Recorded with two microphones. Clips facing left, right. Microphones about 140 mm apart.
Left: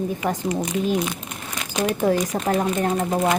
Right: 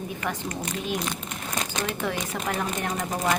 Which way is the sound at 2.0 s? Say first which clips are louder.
Left 8 dB; 40° left (ahead or behind).